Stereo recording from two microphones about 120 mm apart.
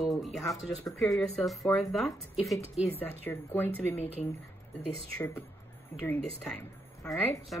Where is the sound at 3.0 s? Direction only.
15° left (ahead or behind).